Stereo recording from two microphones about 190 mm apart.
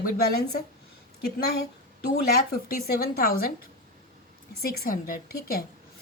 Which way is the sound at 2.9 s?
50° left (ahead or behind).